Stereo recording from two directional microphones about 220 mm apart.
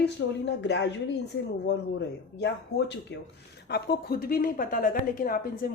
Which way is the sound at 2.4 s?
50° left (ahead or behind).